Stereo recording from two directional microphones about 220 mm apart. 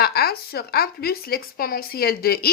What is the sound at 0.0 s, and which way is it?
Speech, 45° left (ahead or behind).